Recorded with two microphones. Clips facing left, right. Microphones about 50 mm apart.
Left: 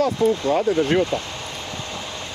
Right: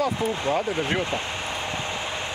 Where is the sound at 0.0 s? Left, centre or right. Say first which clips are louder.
Left 5 dB; centre.